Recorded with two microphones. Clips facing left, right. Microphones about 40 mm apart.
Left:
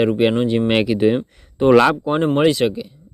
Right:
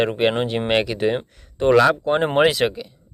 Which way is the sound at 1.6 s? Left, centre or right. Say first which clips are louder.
Left 3 dB; centre.